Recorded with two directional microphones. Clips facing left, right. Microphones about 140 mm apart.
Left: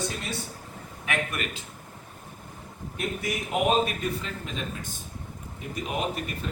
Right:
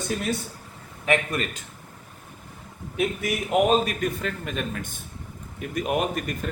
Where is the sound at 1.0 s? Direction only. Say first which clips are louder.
Right 6 dB; 35° right (ahead or behind).